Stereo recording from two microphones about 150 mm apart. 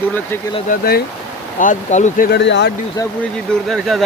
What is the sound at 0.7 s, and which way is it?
Speech, 90° left.